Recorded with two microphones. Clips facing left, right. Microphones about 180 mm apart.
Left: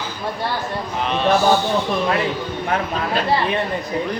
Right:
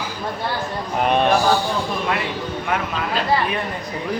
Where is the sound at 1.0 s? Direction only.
50° right (ahead or behind).